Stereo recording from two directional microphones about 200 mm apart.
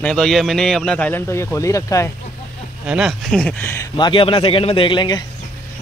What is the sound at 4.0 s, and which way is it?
Speech, 25° left (ahead or behind).